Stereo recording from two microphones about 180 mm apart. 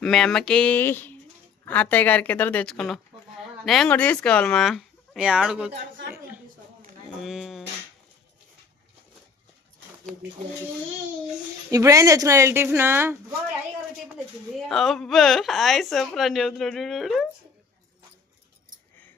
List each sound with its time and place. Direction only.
0.0 s a woman's voice: 5° left (ahead or behind)
7.2 s a woman's voice: centre (ahead or behind)
11.7 s a woman's voice: 20° right (ahead or behind)
14.7 s a woman's voice: centre (ahead or behind)